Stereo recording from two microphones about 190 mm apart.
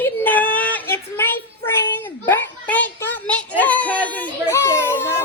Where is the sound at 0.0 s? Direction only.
10° left (ahead or behind).